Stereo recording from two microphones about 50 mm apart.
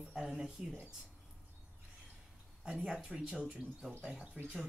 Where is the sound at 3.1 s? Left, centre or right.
Centre.